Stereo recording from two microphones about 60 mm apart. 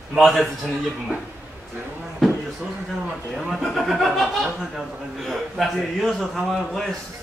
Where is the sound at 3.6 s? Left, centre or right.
Centre.